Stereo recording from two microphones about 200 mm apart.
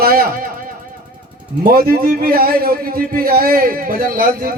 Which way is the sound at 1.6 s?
45° right (ahead or behind).